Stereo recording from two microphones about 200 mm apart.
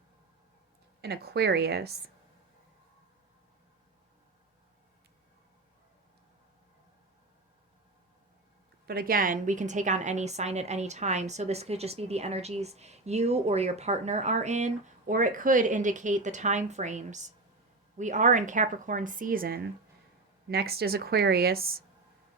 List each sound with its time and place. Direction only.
1.0 s a woman's voice: 50° right (ahead or behind)
8.9 s a woman's voice: 45° right (ahead or behind)